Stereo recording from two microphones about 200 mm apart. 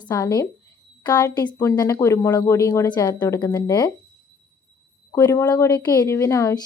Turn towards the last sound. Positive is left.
turn(degrees=15)  # may be behind; listen again after turning